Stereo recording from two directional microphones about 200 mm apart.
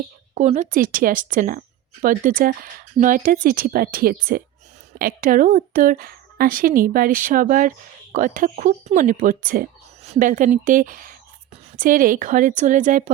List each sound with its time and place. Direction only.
0.3 s speech: 35° right (ahead or behind)